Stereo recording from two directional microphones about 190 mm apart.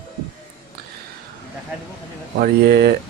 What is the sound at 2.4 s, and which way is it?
Speech, 55° right (ahead or behind).